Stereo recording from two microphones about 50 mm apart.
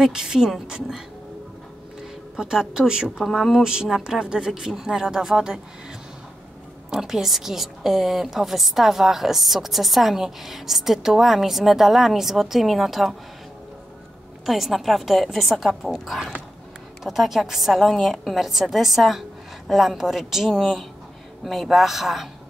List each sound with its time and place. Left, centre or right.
0.0 s speech: centre
2.3 s speech: centre
3.2 s a woman's voice: centre
3.6 s speech: centre
6.9 s a woman's voice: centre
14.4 s a woman's voice: centre
20.5 s a woman's voice: centre